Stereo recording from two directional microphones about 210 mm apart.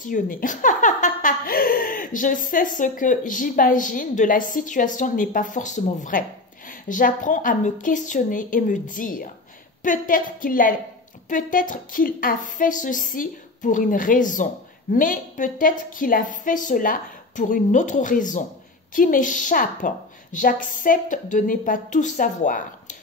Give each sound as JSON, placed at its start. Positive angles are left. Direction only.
{"t": 0.0, "sound": "a woman's voice", "side_deg": 40}